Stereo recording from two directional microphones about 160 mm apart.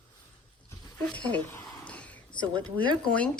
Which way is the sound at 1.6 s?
20° left (ahead or behind).